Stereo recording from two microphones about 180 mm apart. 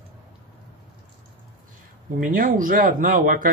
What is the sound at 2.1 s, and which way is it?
Speech, 50° right (ahead or behind).